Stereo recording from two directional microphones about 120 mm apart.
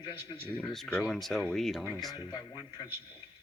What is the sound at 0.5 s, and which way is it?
Speech, 5° left (ahead or behind).